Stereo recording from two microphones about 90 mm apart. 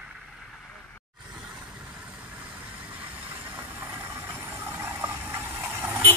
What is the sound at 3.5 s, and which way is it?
Vehicle, 25° right (ahead or behind).